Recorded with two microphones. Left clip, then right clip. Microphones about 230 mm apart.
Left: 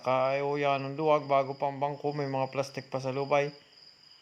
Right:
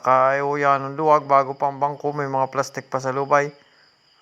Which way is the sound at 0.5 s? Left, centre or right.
Centre.